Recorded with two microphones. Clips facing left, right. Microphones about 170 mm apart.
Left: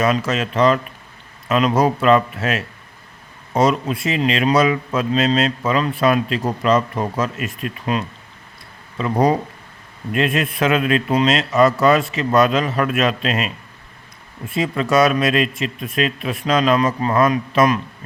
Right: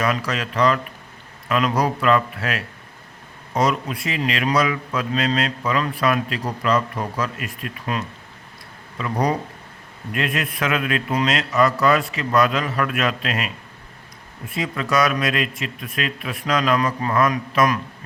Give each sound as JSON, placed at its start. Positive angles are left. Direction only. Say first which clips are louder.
{"t": 0.0, "sound": "a man's voice", "louder": "left 4 dB", "side_deg": 25}